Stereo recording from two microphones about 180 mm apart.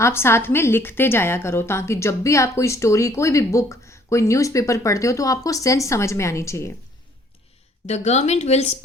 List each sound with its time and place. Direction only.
0.0 s a woman's voice: 15° left (ahead or behind)
7.9 s speech: 40° left (ahead or behind)